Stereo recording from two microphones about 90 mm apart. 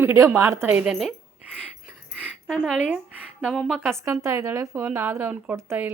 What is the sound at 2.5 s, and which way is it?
Speech, 10° right (ahead or behind).